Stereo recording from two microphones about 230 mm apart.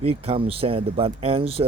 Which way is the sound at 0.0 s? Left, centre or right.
Right.